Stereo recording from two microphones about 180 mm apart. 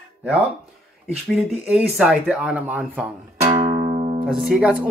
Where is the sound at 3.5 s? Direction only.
35° right (ahead or behind).